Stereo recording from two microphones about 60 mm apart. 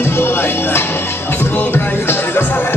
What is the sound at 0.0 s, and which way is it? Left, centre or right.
Music, left.